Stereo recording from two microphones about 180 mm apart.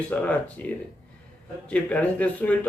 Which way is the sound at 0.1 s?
10° left (ahead or behind).